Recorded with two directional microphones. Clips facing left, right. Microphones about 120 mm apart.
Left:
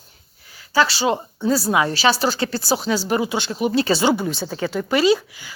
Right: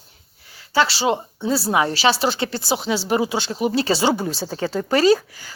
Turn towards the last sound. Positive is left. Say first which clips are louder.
# right 1 dB
turn(degrees=-40)  # may be behind; listen again after turning